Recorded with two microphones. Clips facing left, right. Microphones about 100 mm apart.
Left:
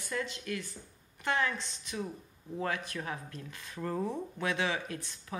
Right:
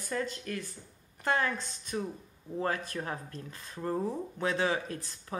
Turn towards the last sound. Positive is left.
turn(degrees=-40)  # may be behind; listen again after turning